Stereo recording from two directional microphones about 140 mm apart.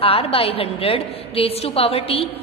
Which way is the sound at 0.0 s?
40° left (ahead or behind).